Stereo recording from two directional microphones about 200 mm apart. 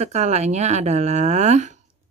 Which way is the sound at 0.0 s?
35° right (ahead or behind).